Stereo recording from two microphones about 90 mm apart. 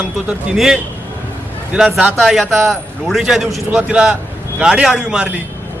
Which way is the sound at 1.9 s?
Centre (ahead or behind).